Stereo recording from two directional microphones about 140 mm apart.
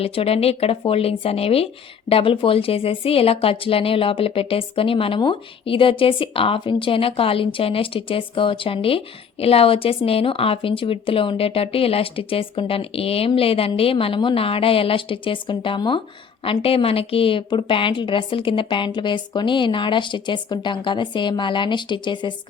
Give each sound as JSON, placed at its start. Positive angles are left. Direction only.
{"t": 0.0, "sound": "speech", "side_deg": 45}